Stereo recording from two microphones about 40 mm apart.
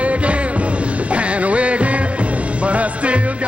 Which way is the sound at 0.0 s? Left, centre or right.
Right.